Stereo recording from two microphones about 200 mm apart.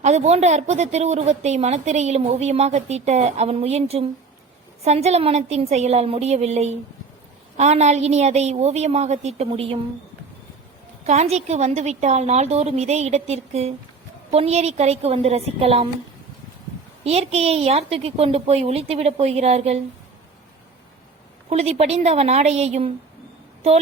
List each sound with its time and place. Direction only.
0.0 s a woman's voice: 35° right (ahead or behind)
11.0 s a woman's voice: 35° right (ahead or behind)
17.0 s a woman's voice: 30° right (ahead or behind)
21.5 s a woman's voice: 30° right (ahead or behind)